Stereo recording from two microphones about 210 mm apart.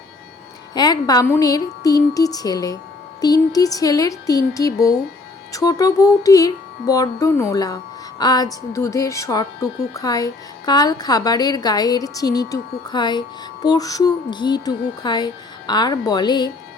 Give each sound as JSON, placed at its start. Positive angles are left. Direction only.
{"t": 0.7, "sound": "speech", "side_deg": 20}